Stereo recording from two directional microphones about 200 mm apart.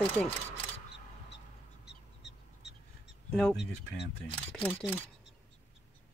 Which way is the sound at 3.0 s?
Centre (ahead or behind).